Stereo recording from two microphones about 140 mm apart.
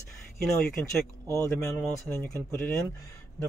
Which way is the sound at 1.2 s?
20° right (ahead or behind).